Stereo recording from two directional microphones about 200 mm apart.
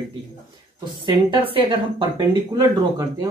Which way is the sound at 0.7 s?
25° right (ahead or behind).